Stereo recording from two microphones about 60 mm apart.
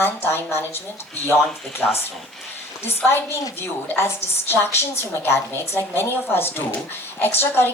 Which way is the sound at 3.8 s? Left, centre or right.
Left.